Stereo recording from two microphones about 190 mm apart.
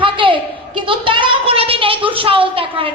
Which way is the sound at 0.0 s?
25° right (ahead or behind).